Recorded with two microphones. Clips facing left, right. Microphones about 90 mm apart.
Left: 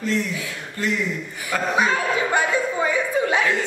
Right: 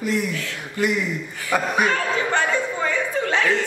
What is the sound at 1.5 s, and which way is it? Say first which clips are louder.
Speech: right 3 dB; 15° right (ahead or behind).